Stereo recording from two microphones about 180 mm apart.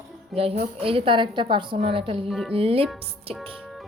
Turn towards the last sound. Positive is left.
turn(degrees=-35)  # may be behind; listen again after turning